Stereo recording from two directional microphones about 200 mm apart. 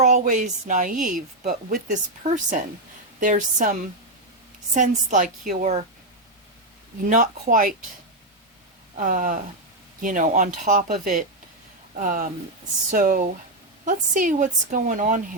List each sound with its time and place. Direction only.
0.0 s a woman's voice: 35° right (ahead or behind)
7.0 s a woman's voice: 40° right (ahead or behind)
9.0 s a woman's voice: 40° right (ahead or behind)